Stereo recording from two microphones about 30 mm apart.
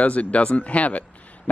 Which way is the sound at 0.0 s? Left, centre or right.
Left.